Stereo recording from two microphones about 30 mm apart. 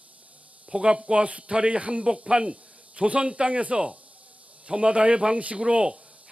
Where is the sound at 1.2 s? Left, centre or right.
Right.